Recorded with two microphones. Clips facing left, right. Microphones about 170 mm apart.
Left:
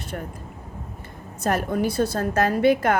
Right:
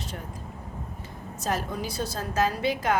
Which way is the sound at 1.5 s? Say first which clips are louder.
Left 7 dB; 60° left (ahead or behind).